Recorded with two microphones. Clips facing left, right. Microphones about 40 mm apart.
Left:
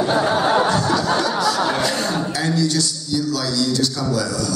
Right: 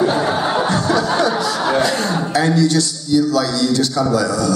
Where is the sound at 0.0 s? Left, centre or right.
Centre.